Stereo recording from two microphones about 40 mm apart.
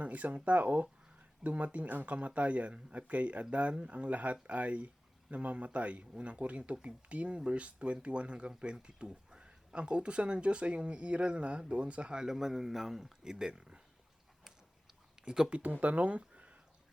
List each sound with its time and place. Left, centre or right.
0.0 s speech: right
12.1 s a man's voice: centre
13.2 s speech: centre
15.2 s speech: right
15.5 s speech: right